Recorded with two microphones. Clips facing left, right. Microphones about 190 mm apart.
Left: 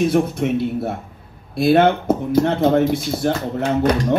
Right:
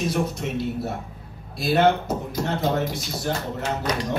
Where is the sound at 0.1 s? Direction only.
55° left (ahead or behind).